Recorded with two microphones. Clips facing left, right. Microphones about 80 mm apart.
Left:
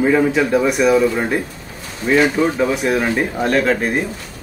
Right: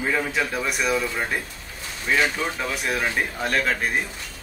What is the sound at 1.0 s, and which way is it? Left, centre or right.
Speech, centre.